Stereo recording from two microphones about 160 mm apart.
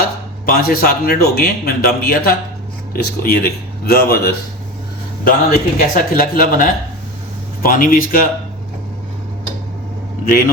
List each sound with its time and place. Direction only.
0.4 s a man's voice: 65° left (ahead or behind)
5.2 s speech: 60° left (ahead or behind)